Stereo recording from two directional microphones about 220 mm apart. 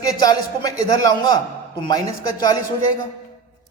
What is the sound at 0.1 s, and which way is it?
Speech, 15° left (ahead or behind).